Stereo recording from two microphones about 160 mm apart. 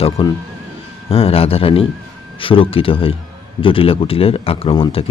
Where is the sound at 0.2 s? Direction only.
35° left (ahead or behind).